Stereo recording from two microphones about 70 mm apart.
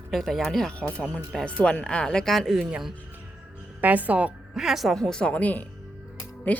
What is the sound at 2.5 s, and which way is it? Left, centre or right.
Speech, centre.